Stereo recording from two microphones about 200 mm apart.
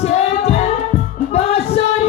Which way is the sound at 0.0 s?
30° left (ahead or behind).